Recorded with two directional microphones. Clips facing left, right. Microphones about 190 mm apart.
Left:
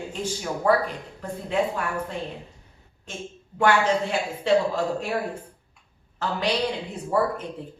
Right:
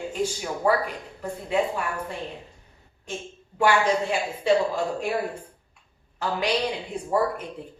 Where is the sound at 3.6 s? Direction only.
10° right (ahead or behind).